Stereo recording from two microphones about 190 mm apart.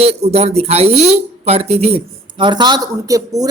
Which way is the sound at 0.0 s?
35° right (ahead or behind).